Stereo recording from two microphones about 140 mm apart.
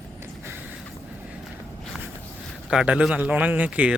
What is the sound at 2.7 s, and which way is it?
A man's voice, 5° right (ahead or behind).